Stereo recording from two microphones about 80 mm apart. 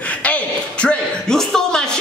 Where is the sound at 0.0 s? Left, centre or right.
Centre.